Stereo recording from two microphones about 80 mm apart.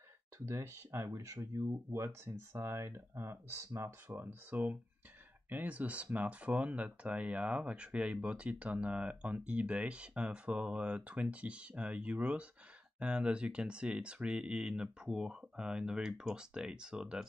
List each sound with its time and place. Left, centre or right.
0.5 s speech: right; by 17.2 s centre